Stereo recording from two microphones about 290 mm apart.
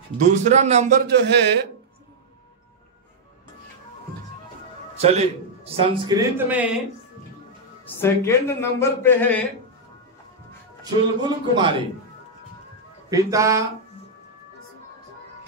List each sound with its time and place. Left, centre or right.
0.2 s a man's voice: right
4.9 s a man's voice: right; by 6.8 s centre
8.0 s speech: centre
10.8 s a man's voice: centre
13.1 s a man's voice: centre